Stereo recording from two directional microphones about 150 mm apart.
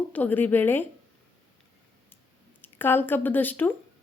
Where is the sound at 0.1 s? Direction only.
10° left (ahead or behind).